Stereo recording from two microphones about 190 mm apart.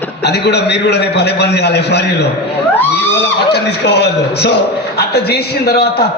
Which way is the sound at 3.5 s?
60° left (ahead or behind).